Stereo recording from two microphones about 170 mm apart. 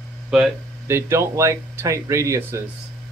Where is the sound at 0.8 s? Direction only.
15° right (ahead or behind).